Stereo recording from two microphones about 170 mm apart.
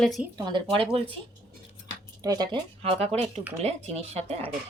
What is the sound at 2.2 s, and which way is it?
Speech, 20° right (ahead or behind).